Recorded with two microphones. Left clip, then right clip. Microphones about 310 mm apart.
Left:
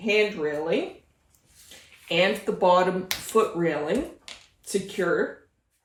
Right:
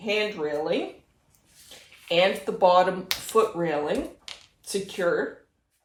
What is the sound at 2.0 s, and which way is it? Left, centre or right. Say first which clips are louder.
Speech: right 1 dB; centre.